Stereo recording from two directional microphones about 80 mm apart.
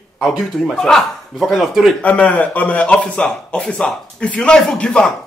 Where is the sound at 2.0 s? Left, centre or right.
Centre.